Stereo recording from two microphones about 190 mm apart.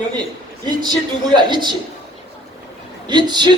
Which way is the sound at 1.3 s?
25° right (ahead or behind).